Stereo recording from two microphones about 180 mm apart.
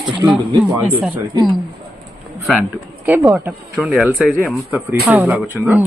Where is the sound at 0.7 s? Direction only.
10° right (ahead or behind).